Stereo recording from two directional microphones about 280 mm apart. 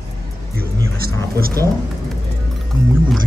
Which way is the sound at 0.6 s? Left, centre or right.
Right.